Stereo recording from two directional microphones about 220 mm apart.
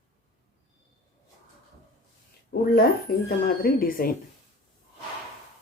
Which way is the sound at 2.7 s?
45° left (ahead or behind).